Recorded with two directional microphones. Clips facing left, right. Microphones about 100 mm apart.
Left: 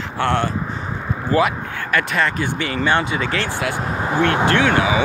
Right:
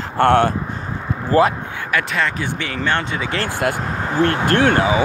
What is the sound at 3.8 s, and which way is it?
Vehicle, 10° left (ahead or behind).